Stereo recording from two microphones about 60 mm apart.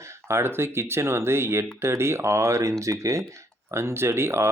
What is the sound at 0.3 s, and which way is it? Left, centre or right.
Speech, right.